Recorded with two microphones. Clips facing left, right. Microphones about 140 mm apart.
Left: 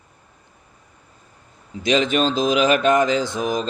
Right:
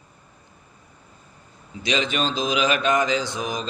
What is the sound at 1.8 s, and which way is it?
A man's voice, 45° left (ahead or behind).